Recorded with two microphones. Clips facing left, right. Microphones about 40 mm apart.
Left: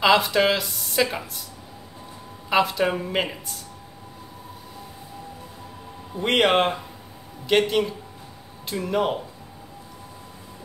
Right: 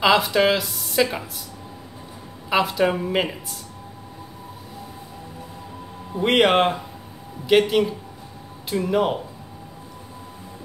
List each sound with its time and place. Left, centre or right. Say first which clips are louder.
0.0 s speech: right 1 dB; centre
2.5 s speech: right 1 dB; centre
6.1 s speech: right 2 dB; centre